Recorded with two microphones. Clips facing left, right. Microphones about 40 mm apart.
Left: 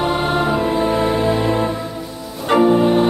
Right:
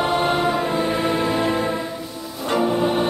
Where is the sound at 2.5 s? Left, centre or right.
Left.